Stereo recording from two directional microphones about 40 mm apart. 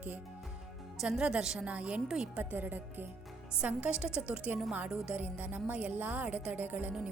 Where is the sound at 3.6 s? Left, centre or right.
Right.